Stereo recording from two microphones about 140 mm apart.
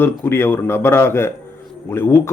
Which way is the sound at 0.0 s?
15° left (ahead or behind).